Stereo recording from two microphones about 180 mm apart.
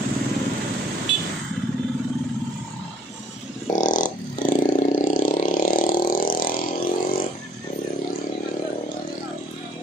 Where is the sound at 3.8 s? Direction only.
45° left (ahead or behind).